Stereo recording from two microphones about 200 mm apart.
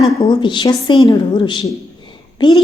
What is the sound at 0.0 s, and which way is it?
A woman's voice, 25° left (ahead or behind).